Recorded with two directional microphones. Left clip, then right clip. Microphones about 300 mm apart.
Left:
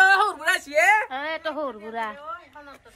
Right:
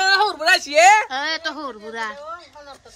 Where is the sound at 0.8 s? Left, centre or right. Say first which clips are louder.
Right 6 dB; right.